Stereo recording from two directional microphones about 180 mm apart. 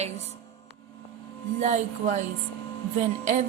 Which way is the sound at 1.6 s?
40° right (ahead or behind).